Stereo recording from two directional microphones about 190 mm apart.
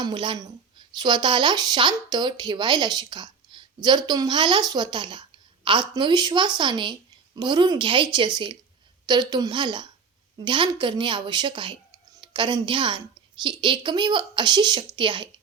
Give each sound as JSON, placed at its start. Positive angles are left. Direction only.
{"t": 0.0, "sound": "a woman's voice", "side_deg": -25}